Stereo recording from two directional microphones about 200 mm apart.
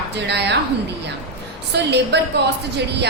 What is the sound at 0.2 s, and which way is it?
Speech, 60° right (ahead or behind).